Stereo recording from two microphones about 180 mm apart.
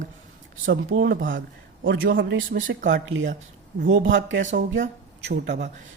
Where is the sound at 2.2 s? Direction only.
80° right.